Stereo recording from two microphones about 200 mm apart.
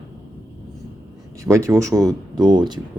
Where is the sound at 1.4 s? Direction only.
15° right (ahead or behind).